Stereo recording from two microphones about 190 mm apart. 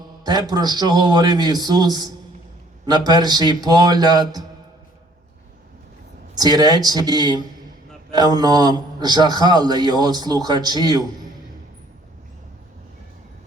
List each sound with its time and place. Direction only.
0.3 s a man's voice: 20° right (ahead or behind)
6.3 s a man's voice: 20° right (ahead or behind)